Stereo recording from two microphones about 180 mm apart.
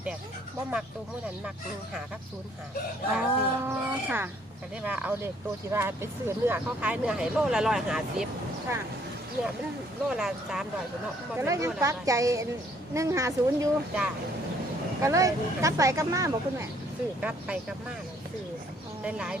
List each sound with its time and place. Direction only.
3.2 s speech: 10° right (ahead or behind)
10.1 s speech: 5° right (ahead or behind)
11.3 s speech: 15° right (ahead or behind)
15.0 s speech: 15° right (ahead or behind)
17.2 s speech: 5° right (ahead or behind)
19.0 s speech: 5° right (ahead or behind)